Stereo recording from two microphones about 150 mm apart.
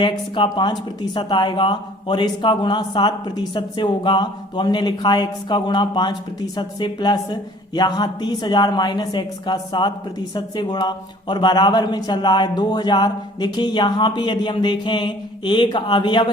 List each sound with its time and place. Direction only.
0.0 s a woman's voice: 30° left (ahead or behind)